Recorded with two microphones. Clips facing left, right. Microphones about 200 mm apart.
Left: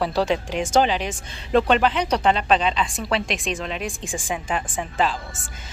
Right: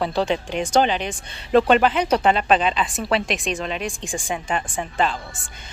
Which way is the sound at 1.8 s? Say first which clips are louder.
Right 2 dB; 50° right (ahead or behind).